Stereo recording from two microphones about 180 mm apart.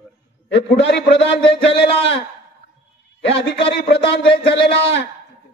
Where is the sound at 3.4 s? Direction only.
70° left (ahead or behind).